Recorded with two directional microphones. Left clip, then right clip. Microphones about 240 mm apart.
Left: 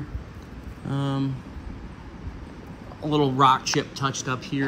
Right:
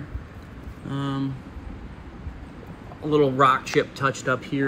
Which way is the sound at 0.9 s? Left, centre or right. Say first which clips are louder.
Left 1 dB; left.